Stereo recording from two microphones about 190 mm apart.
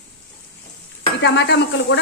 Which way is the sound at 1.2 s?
65° left (ahead or behind).